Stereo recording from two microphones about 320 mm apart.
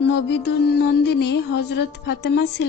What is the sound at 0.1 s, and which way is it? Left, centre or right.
Music, left.